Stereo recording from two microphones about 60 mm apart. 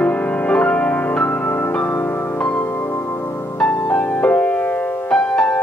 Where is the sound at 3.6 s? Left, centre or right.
Left.